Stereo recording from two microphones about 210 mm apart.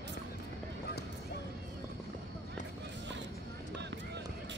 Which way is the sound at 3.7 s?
55° right (ahead or behind).